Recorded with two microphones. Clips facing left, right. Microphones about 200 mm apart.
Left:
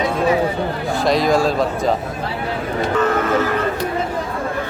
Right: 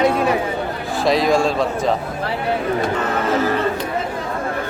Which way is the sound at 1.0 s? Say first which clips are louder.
Even; centre (ahead or behind).